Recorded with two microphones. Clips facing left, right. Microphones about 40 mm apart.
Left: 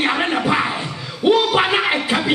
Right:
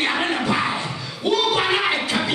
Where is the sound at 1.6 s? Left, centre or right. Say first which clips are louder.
Left 3 dB; centre.